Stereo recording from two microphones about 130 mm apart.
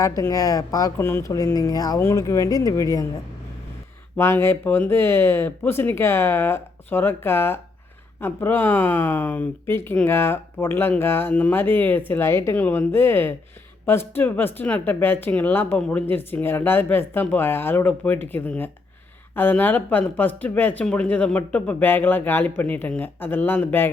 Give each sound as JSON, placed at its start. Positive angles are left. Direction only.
{"t": 0.0, "sound": "speech", "side_deg": 25}
{"t": 4.2, "sound": "speech", "side_deg": 20}